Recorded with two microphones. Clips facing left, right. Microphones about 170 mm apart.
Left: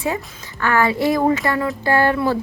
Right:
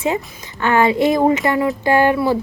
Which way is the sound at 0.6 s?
20° right (ahead or behind).